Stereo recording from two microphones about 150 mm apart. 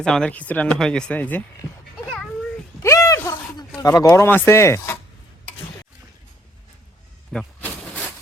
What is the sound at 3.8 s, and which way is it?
Speech, 20° left (ahead or behind).